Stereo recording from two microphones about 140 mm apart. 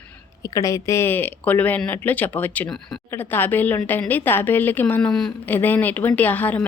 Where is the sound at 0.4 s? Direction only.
25° left (ahead or behind).